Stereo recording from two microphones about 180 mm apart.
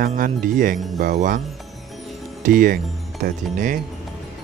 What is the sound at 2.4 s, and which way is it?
Speech, 50° right (ahead or behind).